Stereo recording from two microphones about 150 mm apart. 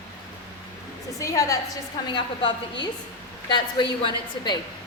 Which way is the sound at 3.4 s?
30° left (ahead or behind).